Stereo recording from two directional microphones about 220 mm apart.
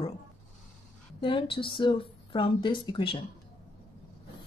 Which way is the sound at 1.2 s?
25° left (ahead or behind).